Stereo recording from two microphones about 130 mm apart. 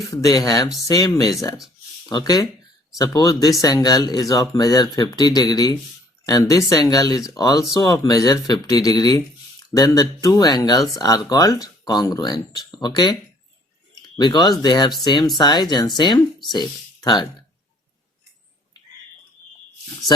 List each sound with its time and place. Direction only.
0.0 s speech: 30° left (ahead or behind)